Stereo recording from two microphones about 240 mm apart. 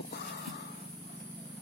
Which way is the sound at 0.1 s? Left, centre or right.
Left.